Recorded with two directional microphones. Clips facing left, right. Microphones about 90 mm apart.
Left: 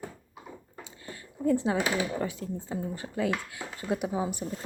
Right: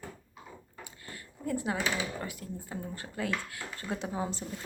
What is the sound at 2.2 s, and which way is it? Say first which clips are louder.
Speech: left 7 dB; 25° left (ahead or behind).